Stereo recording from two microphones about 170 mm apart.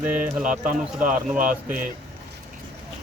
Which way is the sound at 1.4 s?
50° right (ahead or behind).